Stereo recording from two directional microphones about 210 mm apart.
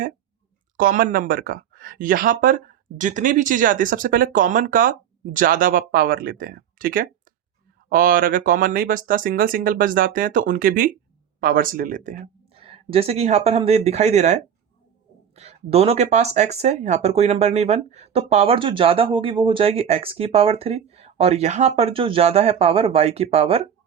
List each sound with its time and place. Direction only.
0.8 s speech: 40° right (ahead or behind)